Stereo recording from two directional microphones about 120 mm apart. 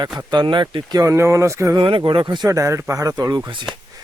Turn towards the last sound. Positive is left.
turn(degrees=-40)  # may be behind; listen again after turning